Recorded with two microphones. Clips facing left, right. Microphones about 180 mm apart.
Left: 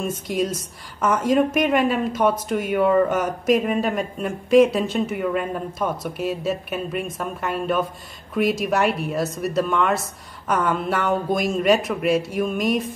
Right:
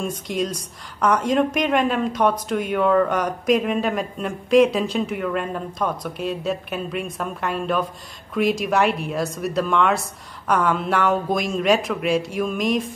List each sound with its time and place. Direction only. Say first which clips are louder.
0.0 s speech: left 1 dB; 5° left (ahead or behind)